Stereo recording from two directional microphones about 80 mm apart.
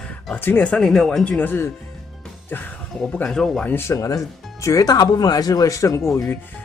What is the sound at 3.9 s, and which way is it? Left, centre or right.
Speech, left.